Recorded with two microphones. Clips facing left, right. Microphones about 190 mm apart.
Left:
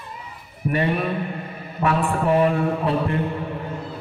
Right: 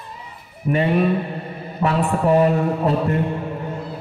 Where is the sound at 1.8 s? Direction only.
35° right (ahead or behind).